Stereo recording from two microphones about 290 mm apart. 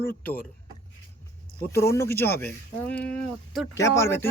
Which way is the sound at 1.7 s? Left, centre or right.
Centre.